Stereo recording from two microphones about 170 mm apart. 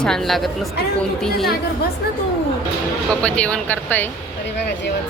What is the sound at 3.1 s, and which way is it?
Speech, 5° left (ahead or behind).